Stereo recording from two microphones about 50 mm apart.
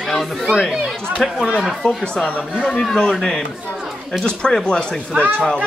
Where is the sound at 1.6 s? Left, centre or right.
Centre.